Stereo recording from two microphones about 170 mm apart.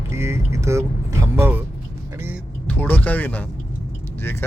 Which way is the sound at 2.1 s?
15° right (ahead or behind).